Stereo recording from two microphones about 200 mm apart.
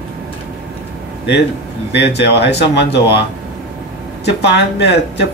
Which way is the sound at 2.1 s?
60° left (ahead or behind).